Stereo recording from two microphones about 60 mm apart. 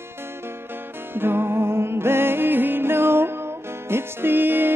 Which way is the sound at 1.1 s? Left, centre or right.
Right.